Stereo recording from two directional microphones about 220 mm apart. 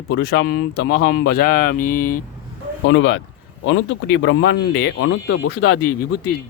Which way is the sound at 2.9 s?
55° left (ahead or behind).